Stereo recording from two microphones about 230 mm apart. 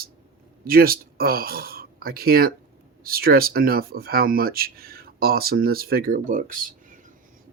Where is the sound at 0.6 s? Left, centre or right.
Right.